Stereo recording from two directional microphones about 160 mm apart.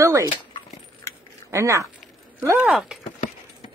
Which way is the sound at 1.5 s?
20° right (ahead or behind).